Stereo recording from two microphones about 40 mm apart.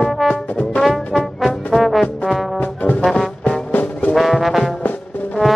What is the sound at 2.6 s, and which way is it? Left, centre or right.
Brass instrument, left.